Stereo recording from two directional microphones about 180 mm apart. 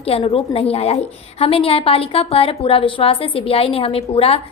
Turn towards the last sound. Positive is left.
turn(degrees=35)  # may be behind; listen again after turning